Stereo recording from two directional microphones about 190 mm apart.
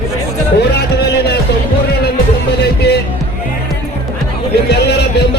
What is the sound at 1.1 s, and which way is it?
Music, 60° left (ahead or behind).